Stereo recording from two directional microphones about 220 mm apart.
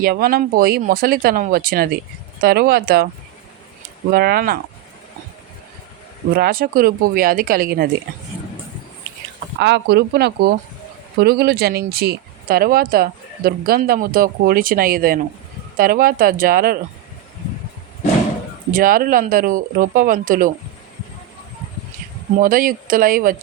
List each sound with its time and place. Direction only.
0.0 s speech: 45° right (ahead or behind)
4.1 s speech: 45° right (ahead or behind)
6.3 s speech: 40° right (ahead or behind)
9.6 s speech: 50° right (ahead or behind)
18.7 s speech: 40° right (ahead or behind)
22.4 s speech: 40° right (ahead or behind)